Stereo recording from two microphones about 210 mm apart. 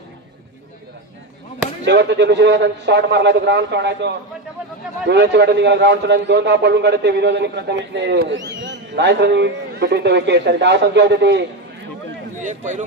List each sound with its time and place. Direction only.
1.9 s a man's voice: 55° right (ahead or behind)
12.4 s a man's voice: 35° right (ahead or behind)